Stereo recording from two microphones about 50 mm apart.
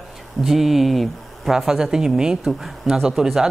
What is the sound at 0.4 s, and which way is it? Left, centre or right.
Speech, centre.